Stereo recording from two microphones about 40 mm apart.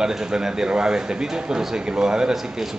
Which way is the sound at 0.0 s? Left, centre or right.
Centre.